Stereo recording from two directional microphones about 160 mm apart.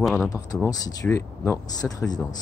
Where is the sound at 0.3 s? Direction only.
20° left (ahead or behind).